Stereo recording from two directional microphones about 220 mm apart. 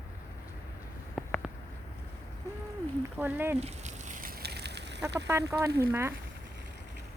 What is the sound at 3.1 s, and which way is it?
Speech, 10° right (ahead or behind).